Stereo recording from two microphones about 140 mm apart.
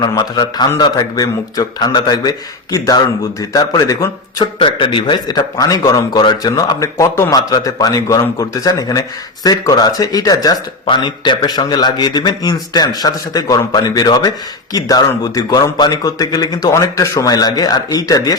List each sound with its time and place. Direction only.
0.0 s a man's voice: 30° left (ahead or behind)
4.6 s a man's voice: 35° left (ahead or behind)